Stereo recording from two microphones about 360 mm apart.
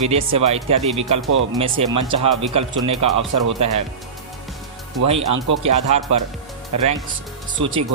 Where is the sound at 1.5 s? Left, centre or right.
Centre.